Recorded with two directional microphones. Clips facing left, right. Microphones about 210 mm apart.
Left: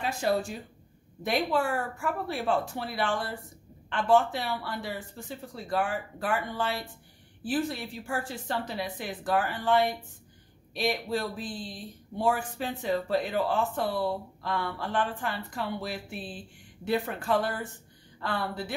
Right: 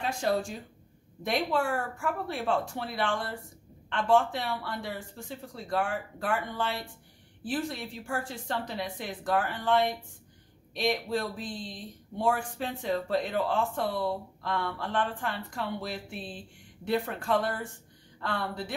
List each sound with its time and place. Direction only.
0.0 s speech: 5° left (ahead or behind)